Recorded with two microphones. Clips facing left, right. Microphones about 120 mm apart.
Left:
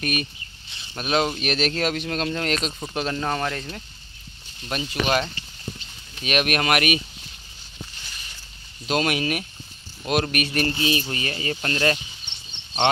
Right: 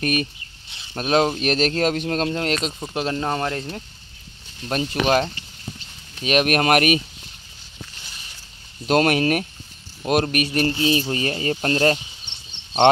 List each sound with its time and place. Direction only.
0.0 s speech: 35° right (ahead or behind)
8.8 s speech: 45° right (ahead or behind); by 12.0 s 30° right (ahead or behind)